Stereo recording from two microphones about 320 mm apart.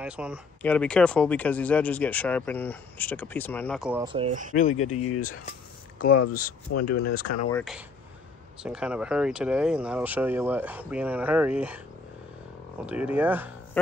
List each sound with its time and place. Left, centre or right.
0.0 s speech: centre
4.0 s speech: centre
4.6 s speech: left
4.8 s speech: left
6.7 s speech: left
8.6 s speech: centre
12.8 s speech: centre